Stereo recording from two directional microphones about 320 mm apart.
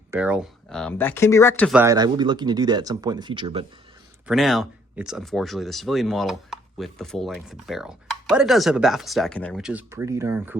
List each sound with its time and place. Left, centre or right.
0.1 s speech: centre
4.3 s speech: centre